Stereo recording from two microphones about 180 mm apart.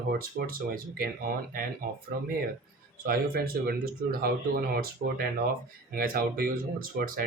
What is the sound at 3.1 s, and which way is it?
Speech, 55° right (ahead or behind).